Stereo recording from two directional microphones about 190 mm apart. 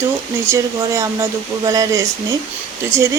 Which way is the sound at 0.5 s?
15° right (ahead or behind).